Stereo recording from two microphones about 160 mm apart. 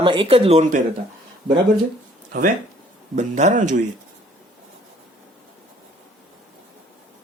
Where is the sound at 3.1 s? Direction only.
50° right (ahead or behind).